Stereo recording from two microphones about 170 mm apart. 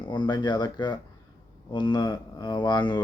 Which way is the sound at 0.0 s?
30° left (ahead or behind).